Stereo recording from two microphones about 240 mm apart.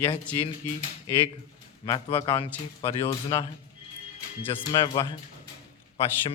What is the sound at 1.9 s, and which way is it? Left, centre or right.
Speech, left.